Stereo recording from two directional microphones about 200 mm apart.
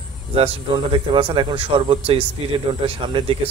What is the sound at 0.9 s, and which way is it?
Speech, 25° right (ahead or behind).